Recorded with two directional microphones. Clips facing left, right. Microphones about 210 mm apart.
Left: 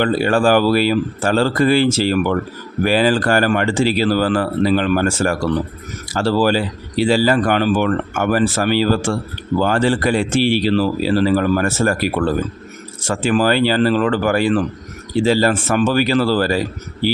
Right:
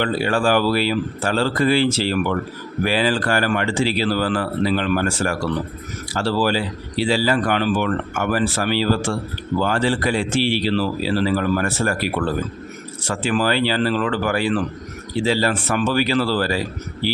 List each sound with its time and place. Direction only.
0.0 s speech: 45° left (ahead or behind)
13.0 s speech: 45° left (ahead or behind)